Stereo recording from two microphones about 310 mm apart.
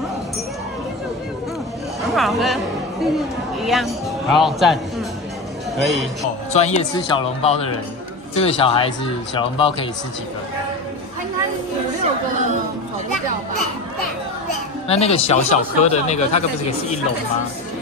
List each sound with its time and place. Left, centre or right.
2.1 s music: centre
3.6 s speech: centre
5.8 s a man's voice: centre
6.5 s speech: left
14.9 s speech: centre